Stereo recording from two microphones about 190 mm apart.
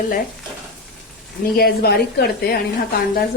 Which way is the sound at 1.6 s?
55° left (ahead or behind).